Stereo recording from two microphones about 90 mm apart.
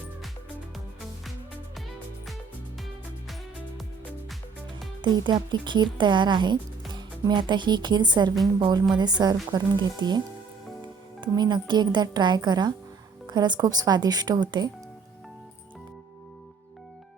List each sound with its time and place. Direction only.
5.0 s speech: 55° right (ahead or behind)